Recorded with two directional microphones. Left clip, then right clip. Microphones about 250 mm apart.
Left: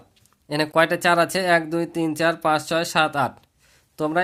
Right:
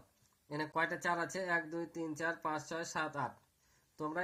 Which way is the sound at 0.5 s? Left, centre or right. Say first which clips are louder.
Left 17 dB; left.